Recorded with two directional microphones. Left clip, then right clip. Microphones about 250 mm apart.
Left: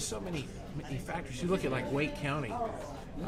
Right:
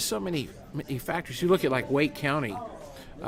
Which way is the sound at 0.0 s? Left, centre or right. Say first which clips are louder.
Right 8 dB; right.